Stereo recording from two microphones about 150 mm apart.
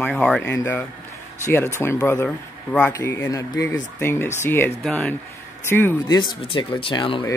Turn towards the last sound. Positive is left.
turn(degrees=35)  # may be behind; listen again after turning